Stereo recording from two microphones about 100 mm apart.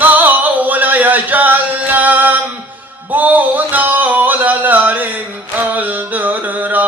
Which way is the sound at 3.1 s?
15° right (ahead or behind).